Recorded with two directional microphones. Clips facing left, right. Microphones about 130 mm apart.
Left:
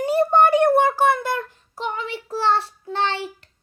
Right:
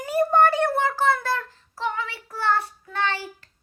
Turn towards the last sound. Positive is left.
turn(degrees=25)  # may be behind; listen again after turning